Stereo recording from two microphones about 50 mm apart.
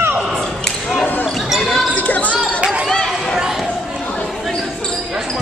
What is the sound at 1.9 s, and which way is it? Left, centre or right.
Basketball bounce, left.